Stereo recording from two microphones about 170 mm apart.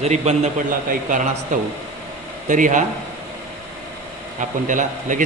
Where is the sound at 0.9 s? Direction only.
50° right (ahead or behind).